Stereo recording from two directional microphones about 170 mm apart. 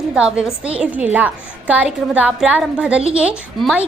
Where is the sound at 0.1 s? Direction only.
5° right (ahead or behind).